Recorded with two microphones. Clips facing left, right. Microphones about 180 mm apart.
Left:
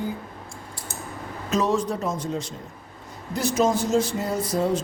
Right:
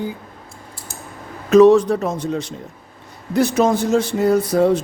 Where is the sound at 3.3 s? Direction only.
60° right (ahead or behind).